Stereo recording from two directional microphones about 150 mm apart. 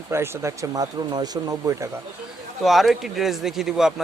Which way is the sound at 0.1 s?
20° right (ahead or behind).